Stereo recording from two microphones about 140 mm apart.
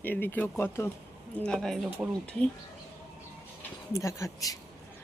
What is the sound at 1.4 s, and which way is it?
Speech, 5° left (ahead or behind).